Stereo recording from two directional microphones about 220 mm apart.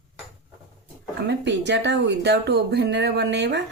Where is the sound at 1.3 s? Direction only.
50° right (ahead or behind).